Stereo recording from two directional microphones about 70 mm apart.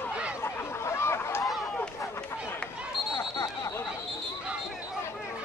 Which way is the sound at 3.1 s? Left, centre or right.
Left.